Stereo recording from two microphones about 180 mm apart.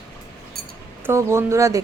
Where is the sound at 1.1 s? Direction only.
15° right (ahead or behind).